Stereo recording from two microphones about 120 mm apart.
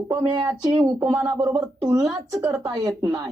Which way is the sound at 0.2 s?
35° right (ahead or behind).